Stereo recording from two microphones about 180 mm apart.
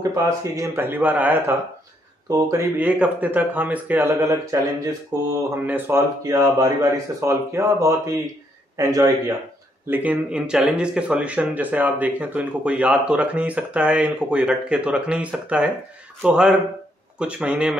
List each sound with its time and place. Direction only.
0.0 s a man's voice: 20° right (ahead or behind)
9.8 s a man's voice: 10° right (ahead or behind)